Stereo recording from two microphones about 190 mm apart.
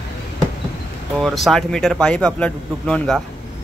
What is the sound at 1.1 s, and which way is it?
A man's voice, centre (ahead or behind).